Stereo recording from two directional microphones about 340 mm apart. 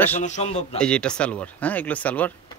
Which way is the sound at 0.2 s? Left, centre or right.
Centre.